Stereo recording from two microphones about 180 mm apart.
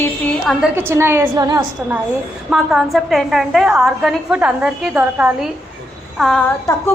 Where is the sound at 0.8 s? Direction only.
15° right (ahead or behind).